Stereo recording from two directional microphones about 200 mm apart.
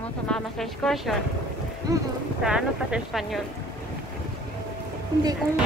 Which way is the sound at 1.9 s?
15° right (ahead or behind).